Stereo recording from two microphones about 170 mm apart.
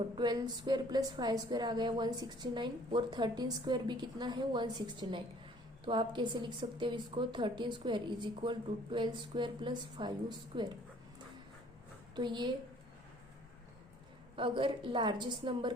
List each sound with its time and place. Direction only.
0.2 s a woman's voice: 25° right (ahead or behind)
12.1 s a woman's voice: 25° right (ahead or behind)
14.3 s a woman's voice: 30° right (ahead or behind)